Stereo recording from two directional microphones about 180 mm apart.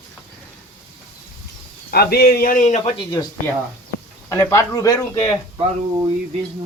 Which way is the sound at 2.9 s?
20° left (ahead or behind).